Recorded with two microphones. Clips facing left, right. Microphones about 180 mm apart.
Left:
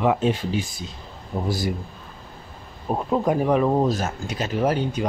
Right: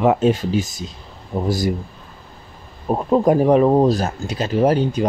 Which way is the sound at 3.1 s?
40° right (ahead or behind).